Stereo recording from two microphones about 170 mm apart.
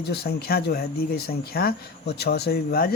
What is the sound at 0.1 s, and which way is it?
Speech, 70° left (ahead or behind).